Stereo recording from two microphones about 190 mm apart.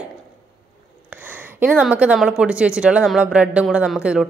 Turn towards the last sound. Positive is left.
turn(degrees=-5)  # may be behind; listen again after turning